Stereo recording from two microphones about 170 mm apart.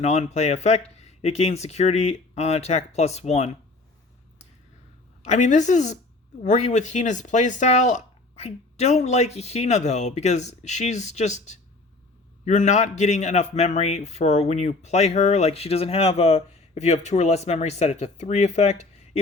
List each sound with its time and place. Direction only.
0.0 s a man's voice: 40° left (ahead or behind)
5.2 s a man's voice: 45° left (ahead or behind)